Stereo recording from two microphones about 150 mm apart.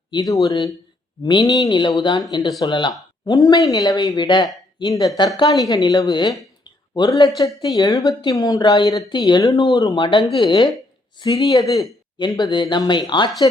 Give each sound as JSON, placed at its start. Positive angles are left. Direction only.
{"t": 0.1, "sound": "speech", "side_deg": 25}